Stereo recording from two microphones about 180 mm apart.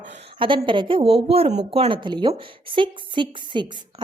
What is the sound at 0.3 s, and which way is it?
A woman's voice, 30° right (ahead or behind).